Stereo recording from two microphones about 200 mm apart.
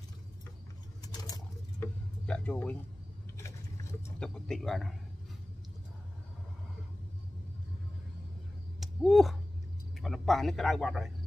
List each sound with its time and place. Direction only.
1.2 s patter: 20° left (ahead or behind)
2.2 s a man's voice: 5° left (ahead or behind)
4.2 s a man's voice: centre (ahead or behind)
8.7 s a sound: centre (ahead or behind)
9.9 s a man's voice: centre (ahead or behind)